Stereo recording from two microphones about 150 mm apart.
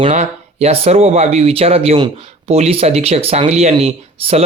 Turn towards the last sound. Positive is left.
turn(degrees=-45)  # may be behind; listen again after turning